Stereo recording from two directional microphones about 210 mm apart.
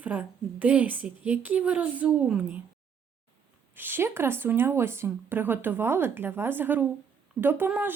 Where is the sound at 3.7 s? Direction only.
10° right (ahead or behind).